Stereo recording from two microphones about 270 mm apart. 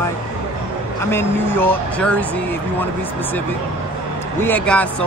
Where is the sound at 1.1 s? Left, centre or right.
Centre.